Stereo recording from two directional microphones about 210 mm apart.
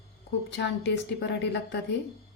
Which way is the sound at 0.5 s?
55° left (ahead or behind).